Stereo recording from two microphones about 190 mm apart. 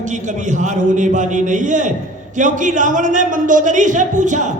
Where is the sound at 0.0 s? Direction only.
40° right (ahead or behind).